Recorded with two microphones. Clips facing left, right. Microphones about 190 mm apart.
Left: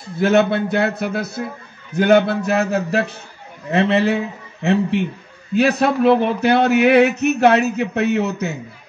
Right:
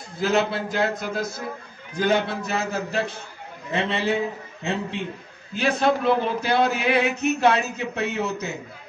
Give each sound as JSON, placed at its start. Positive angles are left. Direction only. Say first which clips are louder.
{"t": 0.2, "sound": "a man's voice", "louder": "left 7 dB", "side_deg": 65}
{"t": 3.7, "sound": "male singing", "louder": "left 7 dB", "side_deg": 65}
{"t": 5.5, "sound": "male singing", "louder": "left 5 dB", "side_deg": 65}